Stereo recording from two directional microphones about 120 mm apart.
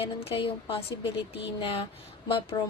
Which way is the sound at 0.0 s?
50° left (ahead or behind).